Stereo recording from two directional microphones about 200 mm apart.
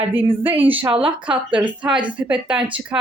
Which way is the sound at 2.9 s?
15° right (ahead or behind).